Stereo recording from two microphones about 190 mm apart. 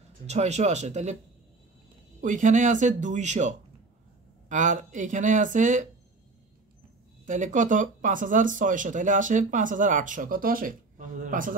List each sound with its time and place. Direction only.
0.3 s speech: 35° right (ahead or behind)
2.2 s speech: 40° right (ahead or behind)
7.2 s speech: 40° right (ahead or behind)